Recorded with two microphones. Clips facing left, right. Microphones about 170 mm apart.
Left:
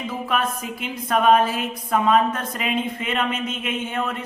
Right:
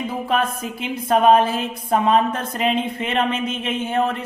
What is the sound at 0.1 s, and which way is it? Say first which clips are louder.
A woman's voice: right 1 dB; 30° right (ahead or behind).